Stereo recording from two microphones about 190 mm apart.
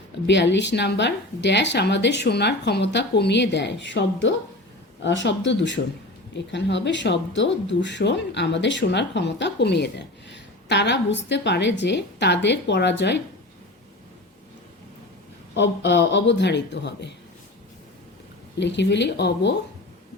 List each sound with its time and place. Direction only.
0.3 s speech: 65° left (ahead or behind)
15.5 s speech: 70° left (ahead or behind)
18.6 s speech: 65° left (ahead or behind)